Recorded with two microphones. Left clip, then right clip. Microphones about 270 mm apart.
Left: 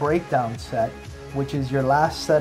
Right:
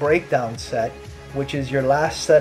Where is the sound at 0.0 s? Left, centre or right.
Left.